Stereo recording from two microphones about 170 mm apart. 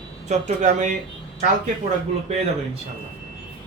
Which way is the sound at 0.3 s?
45° right (ahead or behind).